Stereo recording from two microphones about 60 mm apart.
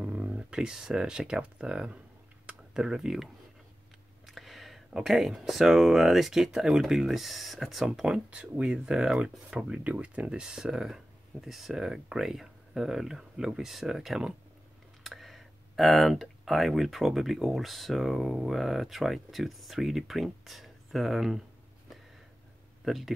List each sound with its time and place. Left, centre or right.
0.0 s speech: right
2.4 s tick: centre
4.3 s a sound: centre
5.0 s speech: centre
8.3 s speech: right; by 21.4 s centre
22.8 s speech: centre